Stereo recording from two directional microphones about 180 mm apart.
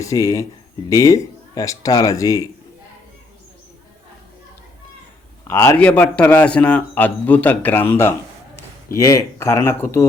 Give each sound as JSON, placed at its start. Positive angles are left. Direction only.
{"t": 0.0, "sound": "a man's voice", "side_deg": 15}
{"t": 5.5, "sound": "a man's voice", "side_deg": 15}